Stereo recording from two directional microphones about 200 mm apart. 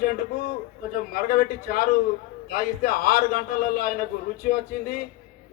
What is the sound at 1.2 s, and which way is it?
A man's voice, 45° left (ahead or behind).